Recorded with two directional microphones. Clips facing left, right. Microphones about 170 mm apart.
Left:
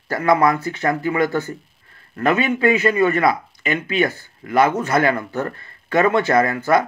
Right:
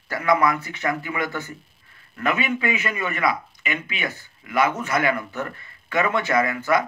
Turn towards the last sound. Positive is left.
turn(degrees=35)  # may be behind; listen again after turning